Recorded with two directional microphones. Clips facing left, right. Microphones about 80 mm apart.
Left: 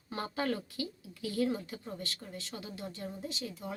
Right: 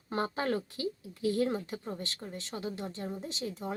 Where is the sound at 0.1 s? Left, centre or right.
Right.